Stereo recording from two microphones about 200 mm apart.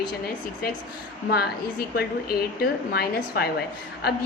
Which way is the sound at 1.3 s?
50° left (ahead or behind).